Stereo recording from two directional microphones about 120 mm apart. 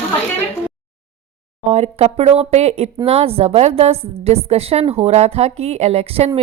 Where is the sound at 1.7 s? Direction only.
60° right (ahead or behind).